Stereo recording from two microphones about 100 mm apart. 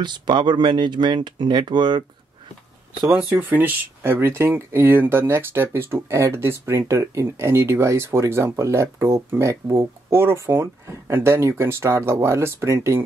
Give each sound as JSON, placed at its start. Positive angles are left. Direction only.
{"t": 0.0, "sound": "speech", "side_deg": -50}
{"t": 3.0, "sound": "speech", "side_deg": -15}